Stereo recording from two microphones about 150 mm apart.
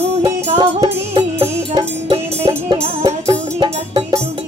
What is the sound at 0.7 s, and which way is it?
Music, 40° right (ahead or behind).